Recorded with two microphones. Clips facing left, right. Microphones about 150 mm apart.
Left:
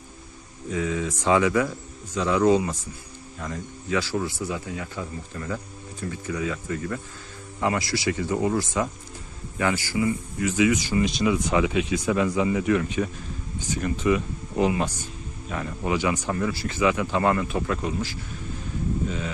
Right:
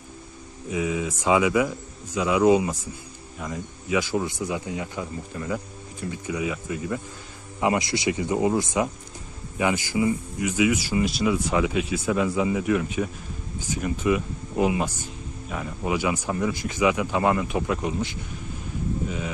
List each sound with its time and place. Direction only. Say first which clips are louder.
0.7 s speech: even; 10° right (ahead or behind)